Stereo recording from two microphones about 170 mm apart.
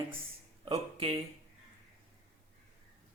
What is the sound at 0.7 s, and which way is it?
Speech, 35° right (ahead or behind).